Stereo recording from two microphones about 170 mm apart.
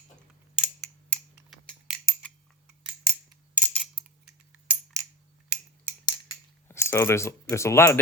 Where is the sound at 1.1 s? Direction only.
5° left (ahead or behind).